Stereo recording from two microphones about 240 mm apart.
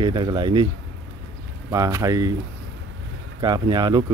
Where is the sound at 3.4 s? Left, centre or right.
Centre.